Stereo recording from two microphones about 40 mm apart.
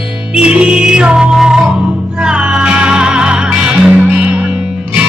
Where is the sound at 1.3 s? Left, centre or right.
Centre.